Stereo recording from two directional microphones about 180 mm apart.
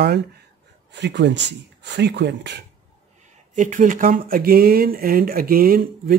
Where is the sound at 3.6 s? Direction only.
45° right (ahead or behind).